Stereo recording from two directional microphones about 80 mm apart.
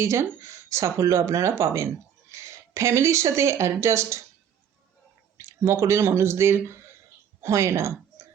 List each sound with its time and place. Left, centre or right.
0.0 s speech: right
5.4 s speech: right